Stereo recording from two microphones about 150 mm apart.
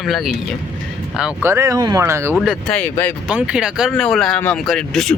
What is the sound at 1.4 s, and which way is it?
Speech, 15° right (ahead or behind).